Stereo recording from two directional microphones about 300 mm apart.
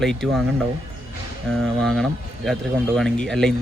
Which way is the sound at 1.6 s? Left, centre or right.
Centre.